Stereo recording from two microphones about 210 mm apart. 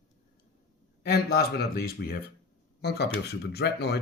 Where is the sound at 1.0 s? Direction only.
50° left (ahead or behind).